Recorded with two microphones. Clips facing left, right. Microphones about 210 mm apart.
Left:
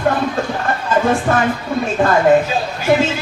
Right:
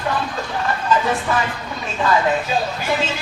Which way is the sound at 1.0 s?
50° left (ahead or behind).